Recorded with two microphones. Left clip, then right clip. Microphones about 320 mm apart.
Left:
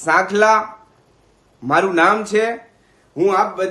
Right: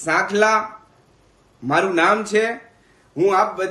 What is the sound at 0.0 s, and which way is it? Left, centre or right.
Speech, centre.